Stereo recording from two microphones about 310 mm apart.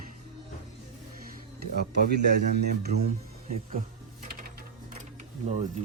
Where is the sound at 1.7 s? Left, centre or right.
Right.